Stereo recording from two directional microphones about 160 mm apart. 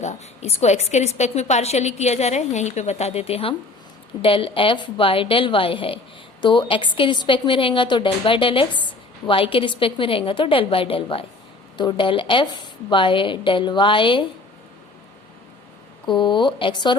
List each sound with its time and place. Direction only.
0.0 s a woman's voice: 45° left (ahead or behind)
16.0 s a woman's voice: 30° left (ahead or behind)